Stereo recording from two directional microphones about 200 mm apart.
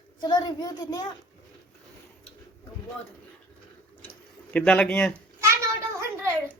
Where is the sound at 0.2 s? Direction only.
20° left (ahead or behind).